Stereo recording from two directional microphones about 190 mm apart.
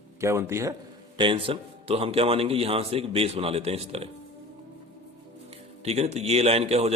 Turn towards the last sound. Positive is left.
turn(degrees=-35)  # may be behind; listen again after turning